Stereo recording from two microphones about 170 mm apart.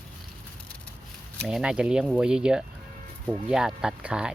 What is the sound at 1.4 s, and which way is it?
Speech, 5° right (ahead or behind).